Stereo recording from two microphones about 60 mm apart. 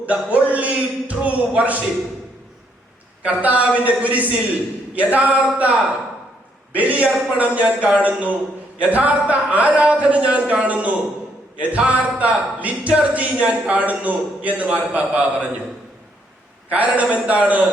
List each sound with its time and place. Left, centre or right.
0.0 s a man's voice: right
3.2 s a man's voice: right
16.6 s a man's voice: right